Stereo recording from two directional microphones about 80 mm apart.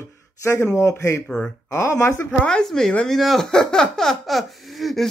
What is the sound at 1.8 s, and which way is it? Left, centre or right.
Speech, left.